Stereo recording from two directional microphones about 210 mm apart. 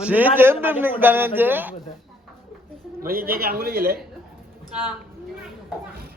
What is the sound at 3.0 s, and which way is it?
Speech, 45° right (ahead or behind).